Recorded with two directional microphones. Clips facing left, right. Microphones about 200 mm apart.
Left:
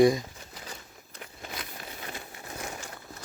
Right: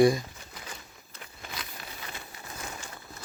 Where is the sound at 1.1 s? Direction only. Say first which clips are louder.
Left 2 dB; 40° left (ahead or behind).